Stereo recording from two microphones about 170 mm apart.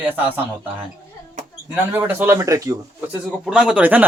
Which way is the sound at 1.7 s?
10° right (ahead or behind).